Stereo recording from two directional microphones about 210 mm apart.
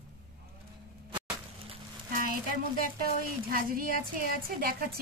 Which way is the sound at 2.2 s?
45° right (ahead or behind).